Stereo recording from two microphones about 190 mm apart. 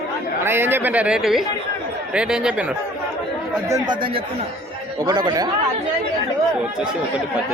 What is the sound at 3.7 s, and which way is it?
Speech, 25° right (ahead or behind).